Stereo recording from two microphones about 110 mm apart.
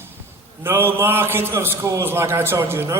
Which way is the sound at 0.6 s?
20° right (ahead or behind).